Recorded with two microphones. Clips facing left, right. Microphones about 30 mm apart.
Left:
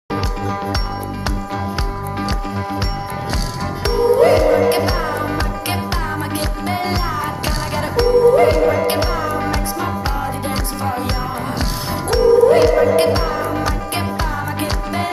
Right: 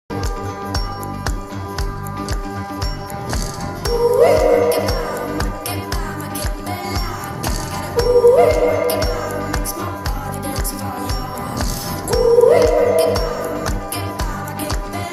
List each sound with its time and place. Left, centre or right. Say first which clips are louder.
2.1 s music: left 3 dB; left
3.8 s music: even; left